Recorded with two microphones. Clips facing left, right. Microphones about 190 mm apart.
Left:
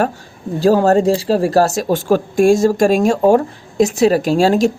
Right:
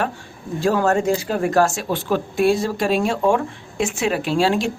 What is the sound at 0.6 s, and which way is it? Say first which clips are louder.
Speech: left 6 dB; 35° left (ahead or behind).